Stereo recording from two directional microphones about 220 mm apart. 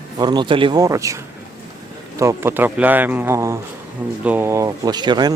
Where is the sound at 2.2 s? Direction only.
10° right (ahead or behind).